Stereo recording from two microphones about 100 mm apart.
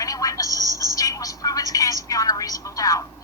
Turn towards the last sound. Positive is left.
turn(degrees=35)  # may be behind; listen again after turning